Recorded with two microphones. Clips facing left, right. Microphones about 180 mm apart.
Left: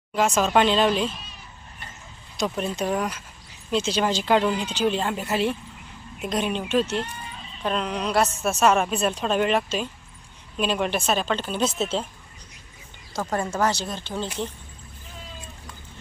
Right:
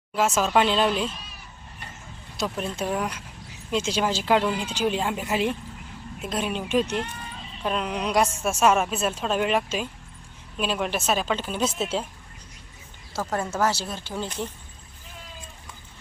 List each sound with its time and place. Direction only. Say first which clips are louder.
0.2 s speech: left 1 dB; 5° right (ahead or behind)
2.4 s a woman's voice: left 2 dB; 5° right (ahead or behind)
13.1 s speech: left 1 dB; 5° right (ahead or behind)